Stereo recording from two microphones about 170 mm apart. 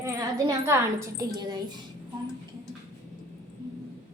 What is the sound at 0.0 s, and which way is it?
A woman's voice, 15° right (ahead or behind).